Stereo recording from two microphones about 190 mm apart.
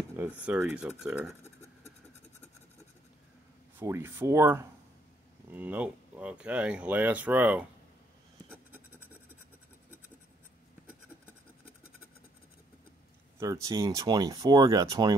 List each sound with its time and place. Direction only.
0.4 s speech: 5° right (ahead or behind)
3.8 s speech: 15° right (ahead or behind)
13.4 s speech: 15° right (ahead or behind)